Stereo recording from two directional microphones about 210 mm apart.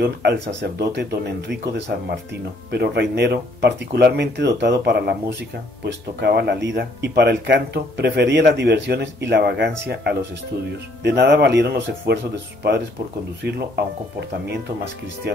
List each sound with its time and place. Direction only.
0.0 s speech: 50° right (ahead or behind)